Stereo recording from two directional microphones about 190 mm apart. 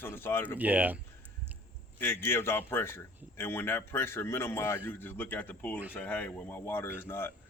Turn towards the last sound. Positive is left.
turn(degrees=10)  # may be behind; listen again after turning